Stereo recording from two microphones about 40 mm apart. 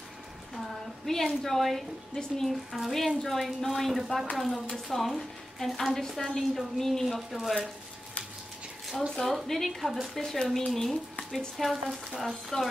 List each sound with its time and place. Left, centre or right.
0.6 s a woman's voice: centre
9.0 s speech: centre
11.7 s speech: centre
12.2 s speech: centre